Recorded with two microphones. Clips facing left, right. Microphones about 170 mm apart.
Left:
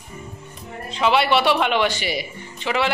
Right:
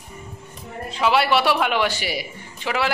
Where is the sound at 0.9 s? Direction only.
5° right (ahead or behind).